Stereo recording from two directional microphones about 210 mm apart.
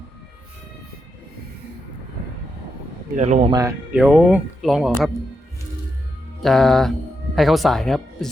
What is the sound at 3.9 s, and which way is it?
Speech, 5° right (ahead or behind).